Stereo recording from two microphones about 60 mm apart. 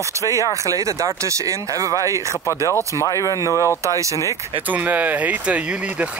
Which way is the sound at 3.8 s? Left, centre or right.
Right.